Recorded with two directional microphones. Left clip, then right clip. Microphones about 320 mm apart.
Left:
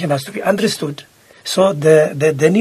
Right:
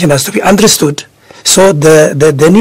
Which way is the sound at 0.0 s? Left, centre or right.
Right.